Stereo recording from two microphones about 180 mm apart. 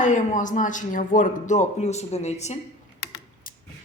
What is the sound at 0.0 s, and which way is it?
Speech, 45° left (ahead or behind).